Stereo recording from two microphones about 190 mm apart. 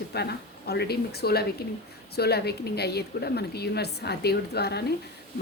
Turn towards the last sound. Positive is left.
turn(degrees=60)  # may be behind; listen again after turning